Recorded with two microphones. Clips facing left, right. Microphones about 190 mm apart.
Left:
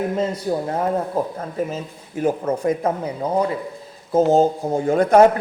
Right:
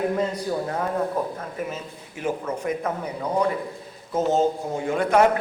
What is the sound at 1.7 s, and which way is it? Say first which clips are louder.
A man's voice: left 6 dB; 40° left (ahead or behind).